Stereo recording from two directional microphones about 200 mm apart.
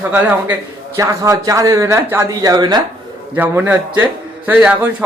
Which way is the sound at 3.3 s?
10° right (ahead or behind).